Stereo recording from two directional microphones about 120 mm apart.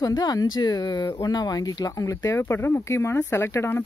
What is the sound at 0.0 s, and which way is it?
Speech, 30° left (ahead or behind).